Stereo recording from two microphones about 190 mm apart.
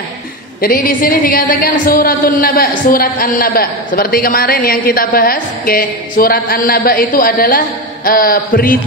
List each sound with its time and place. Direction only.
0.6 s a woman's voice: 50° left (ahead or behind)